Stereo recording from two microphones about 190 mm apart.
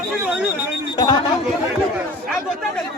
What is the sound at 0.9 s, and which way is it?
Chatter, 20° left (ahead or behind).